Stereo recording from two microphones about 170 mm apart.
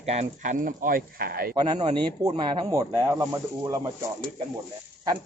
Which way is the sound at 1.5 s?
25° right (ahead or behind).